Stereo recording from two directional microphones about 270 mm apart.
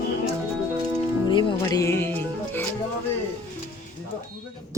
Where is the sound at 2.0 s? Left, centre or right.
Centre.